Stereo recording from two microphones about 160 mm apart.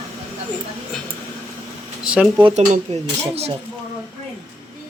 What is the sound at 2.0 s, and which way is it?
Speech, 5° right (ahead or behind).